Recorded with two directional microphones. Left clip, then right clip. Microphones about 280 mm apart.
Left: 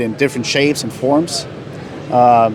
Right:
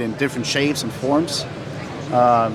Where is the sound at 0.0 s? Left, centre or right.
Centre.